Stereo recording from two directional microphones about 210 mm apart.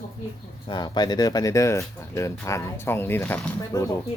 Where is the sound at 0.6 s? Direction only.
20° left (ahead or behind).